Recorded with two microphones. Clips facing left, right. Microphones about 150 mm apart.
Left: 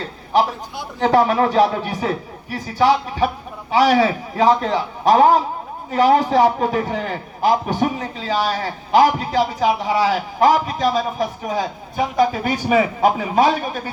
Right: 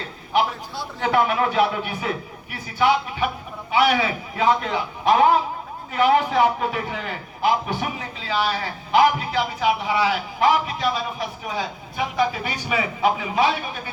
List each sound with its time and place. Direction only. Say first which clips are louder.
1.0 s a man's voice: left 5 dB; 40° left (ahead or behind)